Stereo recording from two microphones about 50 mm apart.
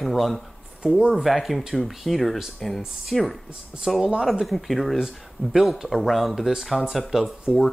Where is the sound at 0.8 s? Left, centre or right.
Centre.